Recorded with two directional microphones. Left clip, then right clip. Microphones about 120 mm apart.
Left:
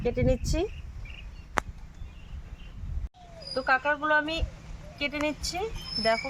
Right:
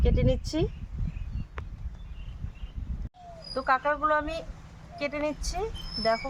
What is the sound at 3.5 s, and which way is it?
Speech, 10° right (ahead or behind).